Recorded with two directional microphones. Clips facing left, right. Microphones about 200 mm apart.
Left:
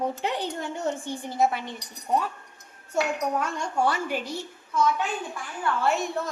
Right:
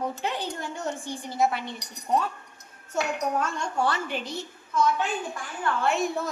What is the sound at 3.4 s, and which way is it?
A woman's voice, 15° left (ahead or behind).